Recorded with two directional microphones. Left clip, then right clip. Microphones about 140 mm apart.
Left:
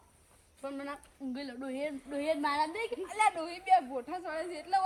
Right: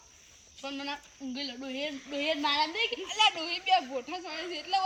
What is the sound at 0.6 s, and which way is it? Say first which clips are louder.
Speech: right 3 dB; 15° left (ahead or behind).